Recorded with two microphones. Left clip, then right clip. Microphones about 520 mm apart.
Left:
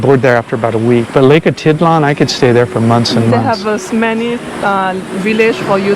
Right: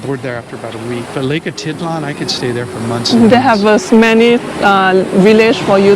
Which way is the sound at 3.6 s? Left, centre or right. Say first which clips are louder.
Right 5 dB; right.